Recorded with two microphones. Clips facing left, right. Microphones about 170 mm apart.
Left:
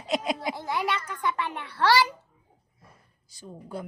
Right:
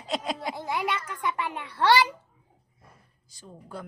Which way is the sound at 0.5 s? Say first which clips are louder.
Left 1 dB; 20° right (ahead or behind).